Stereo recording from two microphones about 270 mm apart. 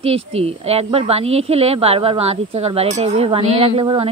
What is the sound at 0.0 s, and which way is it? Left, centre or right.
Speech, right.